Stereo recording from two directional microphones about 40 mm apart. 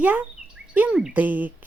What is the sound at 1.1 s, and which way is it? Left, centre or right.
Speech, right.